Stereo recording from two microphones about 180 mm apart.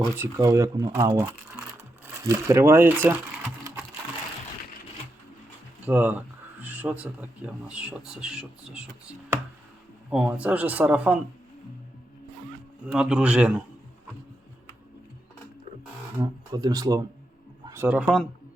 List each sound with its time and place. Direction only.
0.0 s speech: 15° right (ahead or behind)
5.8 s speech: 10° right (ahead or behind)
12.9 s a man's voice: 5° right (ahead or behind)
16.2 s speech: 20° right (ahead or behind)